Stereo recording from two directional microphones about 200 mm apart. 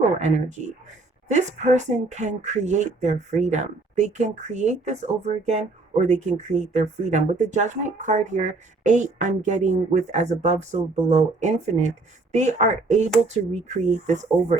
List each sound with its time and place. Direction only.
0.0 s speech: 35° right (ahead or behind)